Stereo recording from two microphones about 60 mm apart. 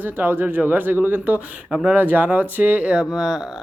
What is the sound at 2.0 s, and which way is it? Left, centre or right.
Speech, right.